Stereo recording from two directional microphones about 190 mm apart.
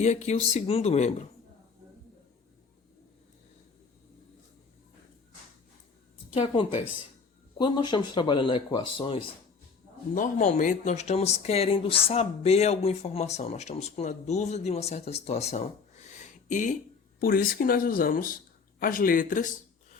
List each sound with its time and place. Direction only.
0.0 s speech: 35° left (ahead or behind)
6.3 s speech: 25° left (ahead or behind)
10.2 s speech: 40° left (ahead or behind)
16.0 s a sound: 40° left (ahead or behind)
17.2 s speech: 50° left (ahead or behind)